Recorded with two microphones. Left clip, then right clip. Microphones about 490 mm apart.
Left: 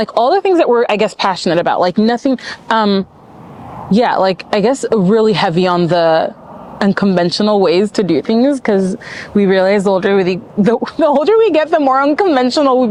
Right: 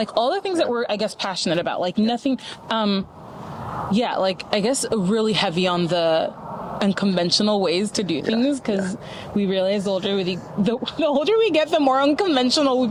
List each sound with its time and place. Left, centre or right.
0.0 s speech: left